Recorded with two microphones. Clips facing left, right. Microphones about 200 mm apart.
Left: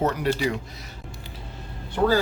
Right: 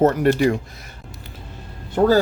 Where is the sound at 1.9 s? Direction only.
40° right (ahead or behind).